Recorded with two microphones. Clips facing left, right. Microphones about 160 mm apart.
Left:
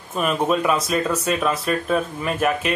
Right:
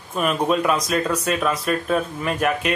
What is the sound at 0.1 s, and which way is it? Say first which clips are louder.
Speech: even; centre (ahead or behind).